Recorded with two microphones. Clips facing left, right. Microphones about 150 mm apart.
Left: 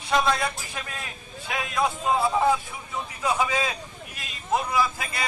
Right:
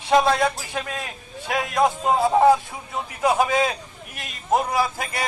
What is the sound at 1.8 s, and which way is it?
A man's voice, 45° right (ahead or behind).